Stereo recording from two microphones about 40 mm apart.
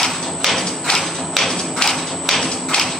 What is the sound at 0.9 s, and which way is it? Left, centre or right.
Music, centre.